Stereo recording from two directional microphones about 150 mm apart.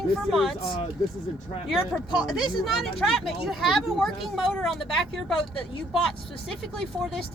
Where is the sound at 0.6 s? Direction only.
35° left (ahead or behind).